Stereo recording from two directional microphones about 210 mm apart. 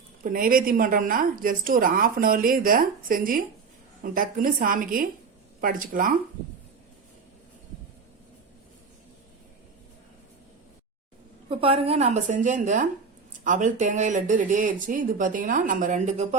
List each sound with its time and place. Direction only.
0.2 s a woman's voice: 40° right (ahead or behind)
11.4 s a woman's voice: 25° right (ahead or behind)